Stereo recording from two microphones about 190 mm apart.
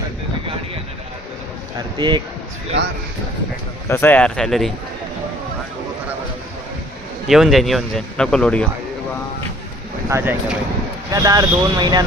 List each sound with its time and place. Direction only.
2.0 s speech: 25° right (ahead or behind)
3.8 s speech: 10° left (ahead or behind)
7.3 s speech: centre (ahead or behind)
10.1 s speech: 15° right (ahead or behind)